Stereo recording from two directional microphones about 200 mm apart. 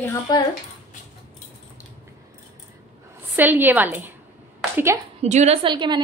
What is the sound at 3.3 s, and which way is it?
Speech, 10° right (ahead or behind).